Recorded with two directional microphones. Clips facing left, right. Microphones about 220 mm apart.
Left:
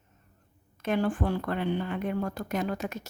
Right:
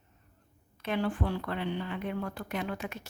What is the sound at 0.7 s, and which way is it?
Speech, 45° left (ahead or behind).